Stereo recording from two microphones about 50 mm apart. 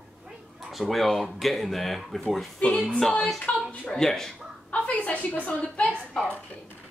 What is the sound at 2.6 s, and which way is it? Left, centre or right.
Speech, left.